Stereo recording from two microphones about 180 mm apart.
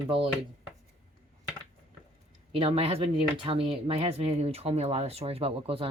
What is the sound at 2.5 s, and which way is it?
Speech, 35° right (ahead or behind).